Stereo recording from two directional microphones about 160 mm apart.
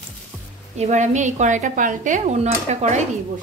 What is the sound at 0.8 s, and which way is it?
Speech, 45° right (ahead or behind).